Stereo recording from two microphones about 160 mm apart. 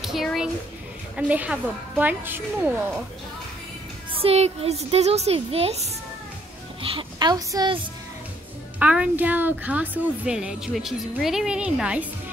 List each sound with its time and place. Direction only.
0.0 s a woman's voice: centre (ahead or behind)
4.1 s a woman's voice: 40° right (ahead or behind)
6.8 s a woman's voice: 35° right (ahead or behind)
8.7 s a woman's voice: 10° right (ahead or behind)